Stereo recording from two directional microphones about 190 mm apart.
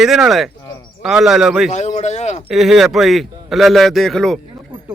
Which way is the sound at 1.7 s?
35° left (ahead or behind).